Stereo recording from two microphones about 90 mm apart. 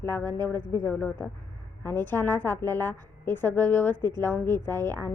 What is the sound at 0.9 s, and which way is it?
Speech, 15° left (ahead or behind).